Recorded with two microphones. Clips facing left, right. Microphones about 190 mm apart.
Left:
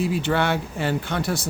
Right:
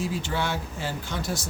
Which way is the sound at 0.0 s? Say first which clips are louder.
Left 6 dB; 65° left (ahead or behind).